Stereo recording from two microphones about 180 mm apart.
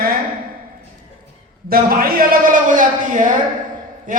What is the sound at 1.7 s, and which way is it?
A man's voice, 55° right (ahead or behind).